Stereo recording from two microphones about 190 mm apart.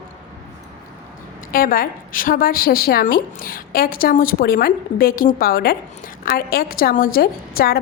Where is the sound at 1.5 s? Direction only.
50° left (ahead or behind).